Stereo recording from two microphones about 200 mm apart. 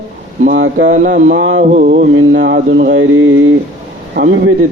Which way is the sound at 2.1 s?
60° right (ahead or behind).